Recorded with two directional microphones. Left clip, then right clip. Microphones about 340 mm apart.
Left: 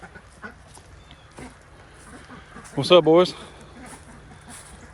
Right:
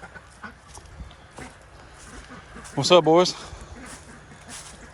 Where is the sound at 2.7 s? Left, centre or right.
Centre.